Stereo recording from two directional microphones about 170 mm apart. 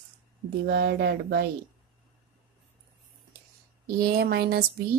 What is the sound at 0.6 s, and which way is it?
Speech, 80° right.